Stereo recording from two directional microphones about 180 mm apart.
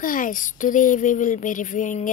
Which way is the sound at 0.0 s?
50° left (ahead or behind).